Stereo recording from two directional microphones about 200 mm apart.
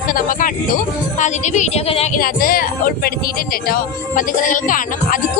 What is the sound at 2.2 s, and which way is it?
A woman's voice, 45° left (ahead or behind).